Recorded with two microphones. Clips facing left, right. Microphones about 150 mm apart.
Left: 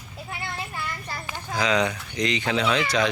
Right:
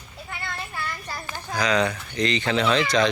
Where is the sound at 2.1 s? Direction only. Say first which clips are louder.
Right 1 dB; 15° left (ahead or behind).